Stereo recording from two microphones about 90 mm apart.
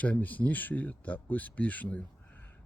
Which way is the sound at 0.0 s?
20° left (ahead or behind).